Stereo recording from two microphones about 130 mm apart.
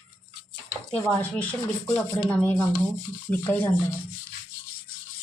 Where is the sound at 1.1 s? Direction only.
10° left (ahead or behind).